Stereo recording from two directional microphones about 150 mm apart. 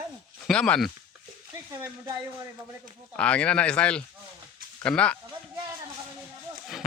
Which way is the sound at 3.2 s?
10° left (ahead or behind).